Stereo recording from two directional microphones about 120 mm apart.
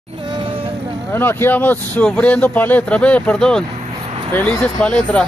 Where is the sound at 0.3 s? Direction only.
45° right (ahead or behind).